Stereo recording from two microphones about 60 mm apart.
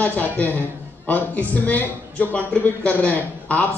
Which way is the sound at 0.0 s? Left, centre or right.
Left.